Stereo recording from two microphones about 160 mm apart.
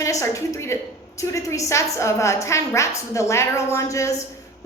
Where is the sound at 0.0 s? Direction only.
20° left (ahead or behind).